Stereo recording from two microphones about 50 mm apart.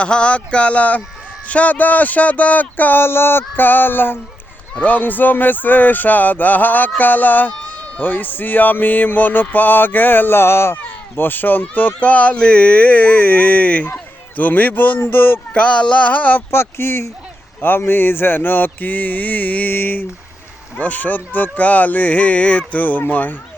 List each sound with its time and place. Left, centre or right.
0.0 s speech: left
3.0 s a sound: left
4.8 s speech: left
10.8 s speech: left
15.5 s speech: left
16.5 s speech: left
19.7 s a sound: left
20.7 s speech: left